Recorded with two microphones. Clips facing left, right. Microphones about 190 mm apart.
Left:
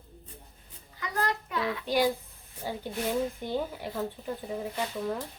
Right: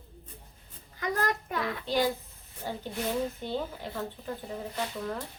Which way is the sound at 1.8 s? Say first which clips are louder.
Left 2 dB; 10° left (ahead or behind).